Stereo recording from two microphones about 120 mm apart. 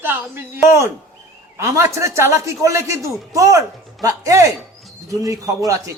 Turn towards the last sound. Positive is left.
turn(degrees=-25)  # may be behind; listen again after turning